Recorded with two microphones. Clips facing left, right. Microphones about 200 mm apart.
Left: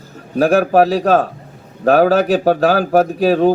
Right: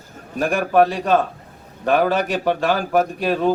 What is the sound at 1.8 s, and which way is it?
Speech, 40° left (ahead or behind).